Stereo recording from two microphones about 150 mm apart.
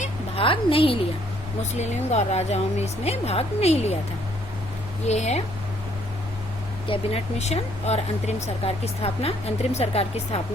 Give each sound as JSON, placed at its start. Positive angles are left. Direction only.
{"t": 0.3, "sound": "a woman's voice", "side_deg": 35}
{"t": 1.8, "sound": "speech", "side_deg": 50}
{"t": 5.0, "sound": "speech", "side_deg": 50}
{"t": 6.8, "sound": "speech", "side_deg": 40}